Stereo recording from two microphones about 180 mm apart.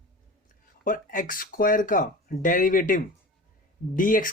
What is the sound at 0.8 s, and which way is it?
Speech, 50° left (ahead or behind).